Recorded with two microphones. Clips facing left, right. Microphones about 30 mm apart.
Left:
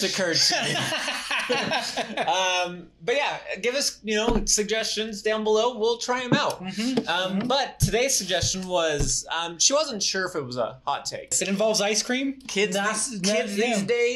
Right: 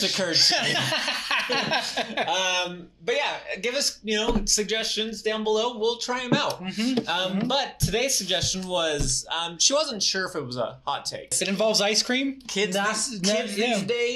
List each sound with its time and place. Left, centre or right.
0.0 s speech: right
0.9 s a sound: right
2.2 s speech: centre; by 10.4 s right
11.4 s speech: right
12.3 s speech: centre